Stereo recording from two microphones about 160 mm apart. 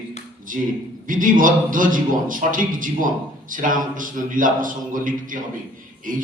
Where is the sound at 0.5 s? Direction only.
55° right (ahead or behind).